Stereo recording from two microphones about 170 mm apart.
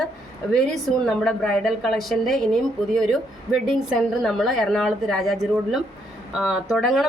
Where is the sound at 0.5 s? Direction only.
Centre (ahead or behind).